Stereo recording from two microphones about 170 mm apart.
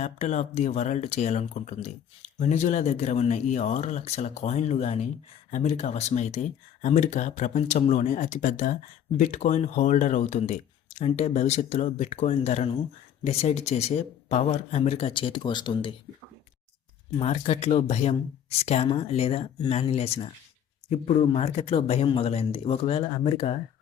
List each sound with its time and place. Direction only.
0.0 s speech: 45° left (ahead or behind)
17.2 s speech: 35° left (ahead or behind)